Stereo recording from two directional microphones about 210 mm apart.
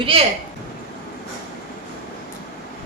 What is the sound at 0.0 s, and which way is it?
Speech, 25° right (ahead or behind).